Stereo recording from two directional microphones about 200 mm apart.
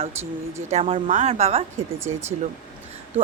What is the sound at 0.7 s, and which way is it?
A woman's voice, 35° right (ahead or behind).